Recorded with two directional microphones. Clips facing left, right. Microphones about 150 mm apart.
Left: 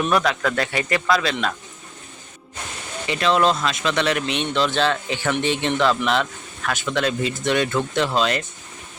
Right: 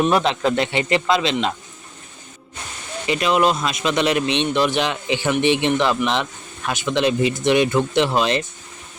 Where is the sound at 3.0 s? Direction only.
20° right (ahead or behind).